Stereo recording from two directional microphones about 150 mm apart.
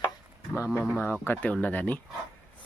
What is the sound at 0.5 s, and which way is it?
Speech, 15° left (ahead or behind).